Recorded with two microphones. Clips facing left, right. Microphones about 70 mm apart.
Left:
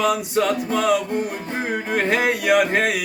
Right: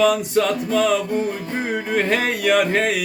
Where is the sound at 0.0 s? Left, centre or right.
Centre.